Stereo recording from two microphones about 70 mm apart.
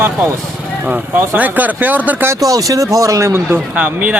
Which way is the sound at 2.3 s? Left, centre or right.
Right.